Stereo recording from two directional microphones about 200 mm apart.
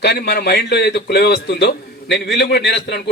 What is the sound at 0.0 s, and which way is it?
A man's voice, 55° left (ahead or behind).